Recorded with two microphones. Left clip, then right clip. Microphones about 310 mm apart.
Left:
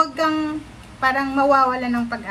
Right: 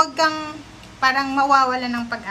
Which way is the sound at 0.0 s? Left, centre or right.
Centre.